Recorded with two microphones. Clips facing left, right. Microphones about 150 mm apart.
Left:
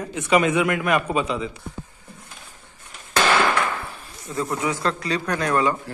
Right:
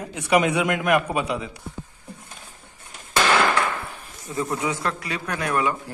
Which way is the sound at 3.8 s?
15° right (ahead or behind).